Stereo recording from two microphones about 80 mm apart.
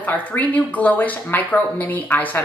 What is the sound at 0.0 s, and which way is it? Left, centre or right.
A woman's voice, centre.